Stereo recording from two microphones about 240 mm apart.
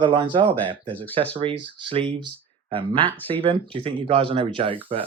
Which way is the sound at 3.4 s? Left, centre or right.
Right.